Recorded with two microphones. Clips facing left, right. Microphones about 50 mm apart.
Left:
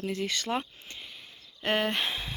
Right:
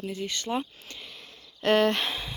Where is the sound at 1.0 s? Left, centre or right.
Centre.